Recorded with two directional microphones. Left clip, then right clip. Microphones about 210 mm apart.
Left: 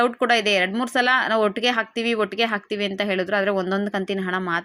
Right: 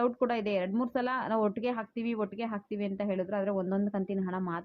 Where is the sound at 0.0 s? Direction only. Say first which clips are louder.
Left 10 dB; 10° left (ahead or behind).